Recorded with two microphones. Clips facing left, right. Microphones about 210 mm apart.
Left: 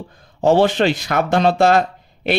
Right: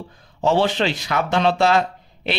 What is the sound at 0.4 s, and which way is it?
Speech, 50° left (ahead or behind).